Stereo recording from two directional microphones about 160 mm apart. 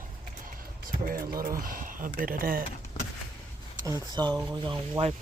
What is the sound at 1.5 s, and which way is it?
Speech, 60° right (ahead or behind).